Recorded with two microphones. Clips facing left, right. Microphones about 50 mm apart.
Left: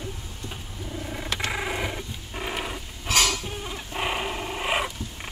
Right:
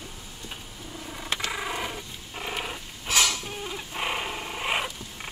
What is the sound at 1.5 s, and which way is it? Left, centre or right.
Dog, centre.